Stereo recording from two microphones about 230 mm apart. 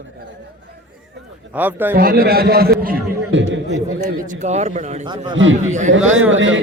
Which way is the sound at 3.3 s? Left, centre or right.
Right.